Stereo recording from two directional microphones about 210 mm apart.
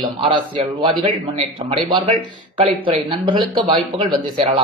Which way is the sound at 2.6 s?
25° right (ahead or behind).